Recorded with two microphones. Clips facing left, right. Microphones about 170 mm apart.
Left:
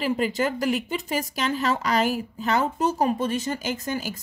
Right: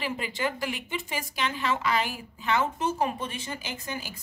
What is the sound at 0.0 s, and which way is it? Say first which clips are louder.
A woman's voice: left 7 dB; 40° left (ahead or behind).